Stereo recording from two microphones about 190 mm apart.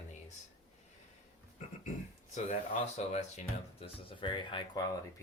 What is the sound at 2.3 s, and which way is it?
Speech, 35° left (ahead or behind).